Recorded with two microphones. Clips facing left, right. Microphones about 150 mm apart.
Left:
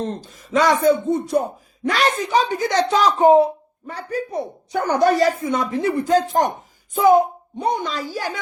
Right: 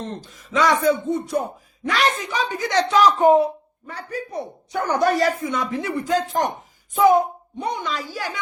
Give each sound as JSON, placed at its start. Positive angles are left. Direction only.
{"t": 0.0, "sound": "speech", "side_deg": 40}
{"t": 3.2, "sound": "speech", "side_deg": 25}
{"t": 6.9, "sound": "speech", "side_deg": 30}
{"t": 7.6, "sound": "speech", "side_deg": 40}